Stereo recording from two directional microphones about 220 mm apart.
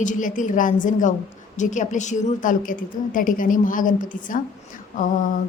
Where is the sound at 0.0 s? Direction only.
35° left (ahead or behind).